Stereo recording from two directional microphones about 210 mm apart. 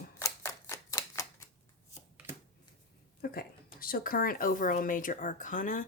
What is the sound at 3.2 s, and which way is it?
A woman's voice, 45° left (ahead or behind).